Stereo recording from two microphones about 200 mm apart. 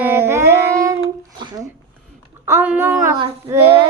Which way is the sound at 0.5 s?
15° right (ahead or behind).